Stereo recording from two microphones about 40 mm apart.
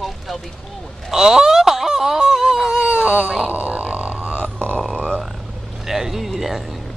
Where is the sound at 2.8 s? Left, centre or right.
Right.